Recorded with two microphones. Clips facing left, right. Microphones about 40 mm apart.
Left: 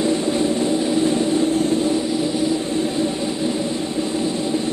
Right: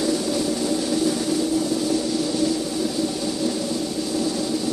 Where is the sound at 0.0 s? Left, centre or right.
Left.